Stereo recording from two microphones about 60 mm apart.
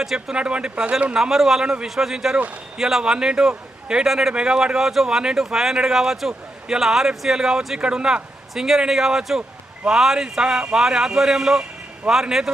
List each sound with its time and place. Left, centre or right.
0.0 s speech: centre
0.3 s a man's voice: centre
1.1 s a man's voice: centre